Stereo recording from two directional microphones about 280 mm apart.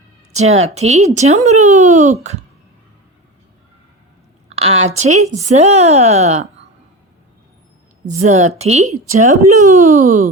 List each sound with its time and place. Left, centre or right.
0.3 s speech: right
4.4 s a sound: right
4.9 s speech: right
8.2 s speech: right